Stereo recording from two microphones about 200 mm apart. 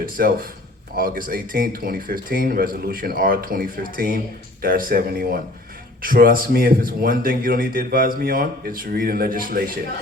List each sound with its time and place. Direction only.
0.0 s a man's voice: 45° right (ahead or behind)